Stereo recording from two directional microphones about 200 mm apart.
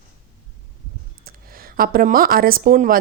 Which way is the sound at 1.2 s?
45° right (ahead or behind).